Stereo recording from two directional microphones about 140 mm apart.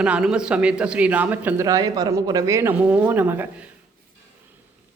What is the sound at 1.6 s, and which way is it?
Speech, 25° right (ahead or behind).